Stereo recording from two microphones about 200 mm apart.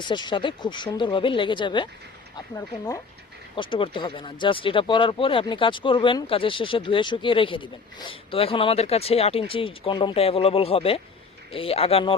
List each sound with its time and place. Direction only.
0.0 s speech: 20° left (ahead or behind)